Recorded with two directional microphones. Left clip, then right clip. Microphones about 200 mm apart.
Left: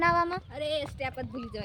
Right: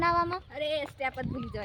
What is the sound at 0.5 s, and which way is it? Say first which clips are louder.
Speech: even; 5° left (ahead or behind).